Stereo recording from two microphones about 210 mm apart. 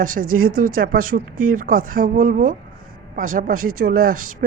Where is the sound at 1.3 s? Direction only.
90° right.